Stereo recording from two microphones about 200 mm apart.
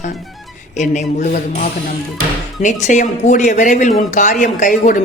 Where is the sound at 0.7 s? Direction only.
35° left (ahead or behind).